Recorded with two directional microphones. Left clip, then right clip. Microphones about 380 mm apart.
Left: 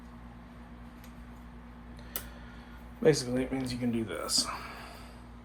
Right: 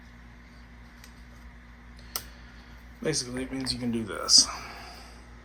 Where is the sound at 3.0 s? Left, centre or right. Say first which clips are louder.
Left 5 dB; centre.